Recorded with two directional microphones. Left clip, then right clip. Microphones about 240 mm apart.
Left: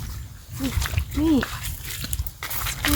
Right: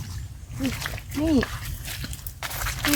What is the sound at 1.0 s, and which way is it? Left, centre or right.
Splash, left.